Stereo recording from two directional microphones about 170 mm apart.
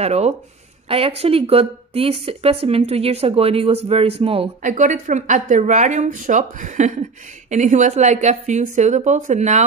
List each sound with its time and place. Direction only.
0.0 s speech: 40° right (ahead or behind)
4.6 s a woman's voice: 50° right (ahead or behind)